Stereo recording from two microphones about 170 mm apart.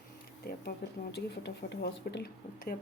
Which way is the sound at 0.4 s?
70° left (ahead or behind).